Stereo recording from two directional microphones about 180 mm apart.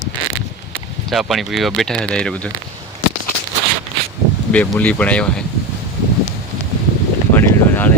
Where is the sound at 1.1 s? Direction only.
Centre (ahead or behind).